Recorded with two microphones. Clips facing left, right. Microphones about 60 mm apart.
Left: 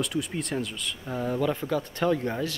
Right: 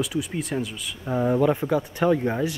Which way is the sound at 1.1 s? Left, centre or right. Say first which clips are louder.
Right 7 dB; centre.